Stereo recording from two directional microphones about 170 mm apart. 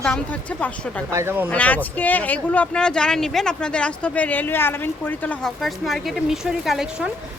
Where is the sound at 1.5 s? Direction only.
10° left (ahead or behind).